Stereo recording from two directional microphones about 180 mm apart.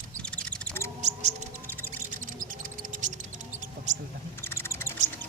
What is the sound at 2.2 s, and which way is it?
Music, 50° right (ahead or behind).